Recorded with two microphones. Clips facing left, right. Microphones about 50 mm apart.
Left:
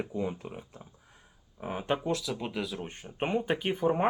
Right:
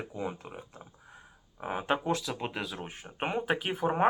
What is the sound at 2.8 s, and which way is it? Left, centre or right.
Speech, centre.